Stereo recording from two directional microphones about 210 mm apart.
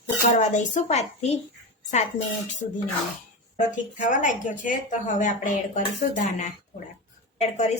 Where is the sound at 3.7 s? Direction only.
35° left (ahead or behind).